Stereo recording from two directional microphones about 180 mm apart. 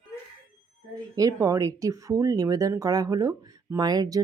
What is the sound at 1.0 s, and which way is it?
Speech, 20° right (ahead or behind).